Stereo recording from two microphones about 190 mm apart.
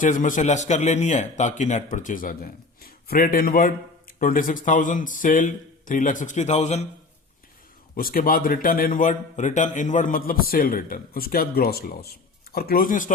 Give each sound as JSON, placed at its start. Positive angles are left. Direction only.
{"t": 0.0, "sound": "a man's voice", "side_deg": 45}
{"t": 7.9, "sound": "a man's voice", "side_deg": 50}